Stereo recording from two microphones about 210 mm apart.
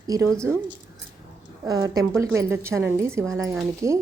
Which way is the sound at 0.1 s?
15° right (ahead or behind).